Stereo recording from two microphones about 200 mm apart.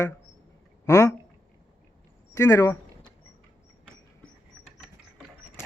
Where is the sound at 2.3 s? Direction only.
15° left (ahead or behind).